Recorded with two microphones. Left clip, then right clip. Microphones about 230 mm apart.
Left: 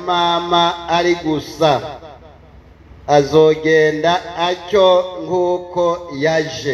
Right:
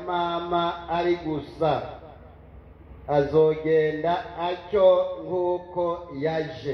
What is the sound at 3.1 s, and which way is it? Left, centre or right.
Speech, left.